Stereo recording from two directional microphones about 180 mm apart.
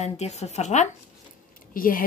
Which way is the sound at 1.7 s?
50° left (ahead or behind).